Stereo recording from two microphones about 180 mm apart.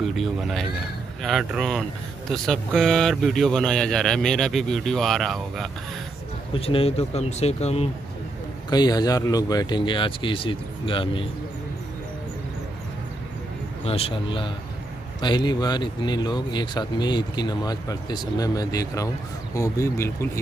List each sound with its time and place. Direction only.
0.0 s speech: centre (ahead or behind)
6.5 s speech: 30° left (ahead or behind)
8.6 s speech: 20° left (ahead or behind)
13.8 s speech: 30° left (ahead or behind); by 20.2 s 15° left (ahead or behind)